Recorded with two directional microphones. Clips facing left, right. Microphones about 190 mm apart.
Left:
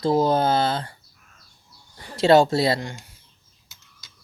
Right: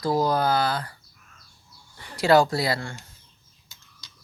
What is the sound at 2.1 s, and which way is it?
Speech, 25° left (ahead or behind).